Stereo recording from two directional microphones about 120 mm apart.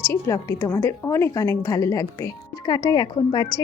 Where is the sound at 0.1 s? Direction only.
25° left (ahead or behind).